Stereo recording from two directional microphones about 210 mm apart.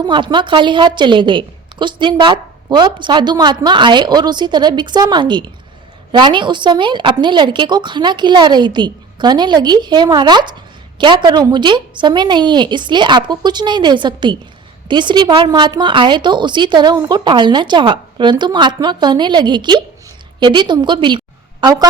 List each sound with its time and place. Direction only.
0.0 s a woman's voice: 20° right (ahead or behind)